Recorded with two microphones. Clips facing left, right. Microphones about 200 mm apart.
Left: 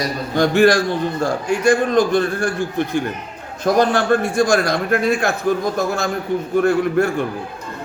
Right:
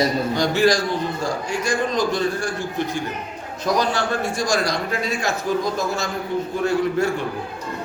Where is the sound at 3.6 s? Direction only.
55° left (ahead or behind).